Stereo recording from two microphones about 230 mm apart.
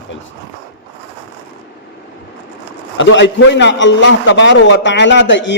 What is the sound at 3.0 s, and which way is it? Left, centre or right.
A man's voice, left.